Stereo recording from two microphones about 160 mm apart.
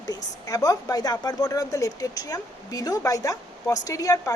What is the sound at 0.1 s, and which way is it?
A woman's voice, 25° left (ahead or behind).